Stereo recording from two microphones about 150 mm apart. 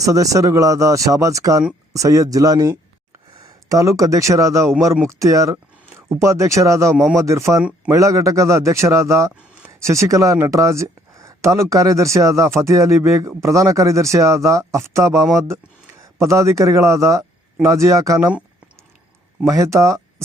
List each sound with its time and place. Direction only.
0.0 s speech: 20° right (ahead or behind)
19.5 s speech: 20° right (ahead or behind)